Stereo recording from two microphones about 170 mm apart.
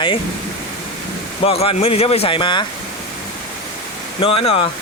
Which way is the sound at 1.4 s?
35° left (ahead or behind).